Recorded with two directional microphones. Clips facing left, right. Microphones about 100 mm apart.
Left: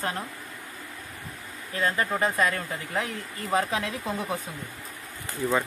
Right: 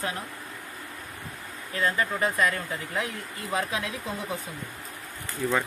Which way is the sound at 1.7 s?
35° left (ahead or behind).